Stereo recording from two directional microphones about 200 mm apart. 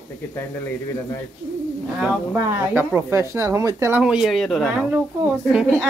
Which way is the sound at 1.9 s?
10° right (ahead or behind).